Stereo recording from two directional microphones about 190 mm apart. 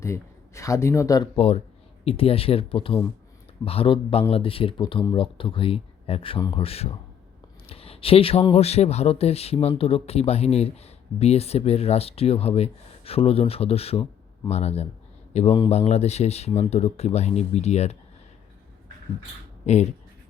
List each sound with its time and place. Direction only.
0.0 s speech: 15° left (ahead or behind)
1.4 s a man's voice: 30° left (ahead or behind)